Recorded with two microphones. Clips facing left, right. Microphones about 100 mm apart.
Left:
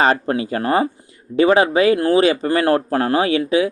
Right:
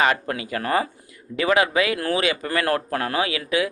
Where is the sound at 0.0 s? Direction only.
35° left (ahead or behind).